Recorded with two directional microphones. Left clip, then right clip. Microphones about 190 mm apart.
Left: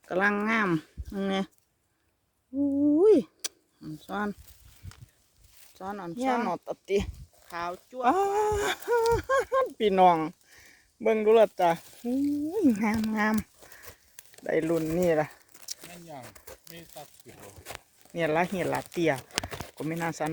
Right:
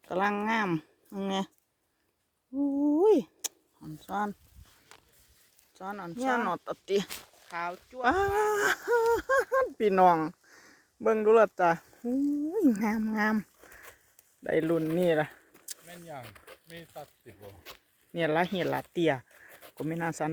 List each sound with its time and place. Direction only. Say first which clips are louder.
0.1 s speech: left 3 dB; 10° left (ahead or behind)
2.8 s a sound: left 3 dB; 5° left (ahead or behind)
5.7 s speech: left 2 dB; 10° left (ahead or behind)
7.5 s speech: left 1 dB; 15° left (ahead or behind)
8.0 s speech: left 2 dB; 5° right (ahead or behind)
16.2 s a sound: left 2 dB; 10° left (ahead or behind)
16.7 s speech: right 2 dB; 55° left (ahead or behind)
18.1 s speech: left 1 dB; 5° right (ahead or behind)